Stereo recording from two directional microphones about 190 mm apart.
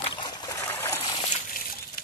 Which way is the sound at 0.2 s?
15° left (ahead or behind).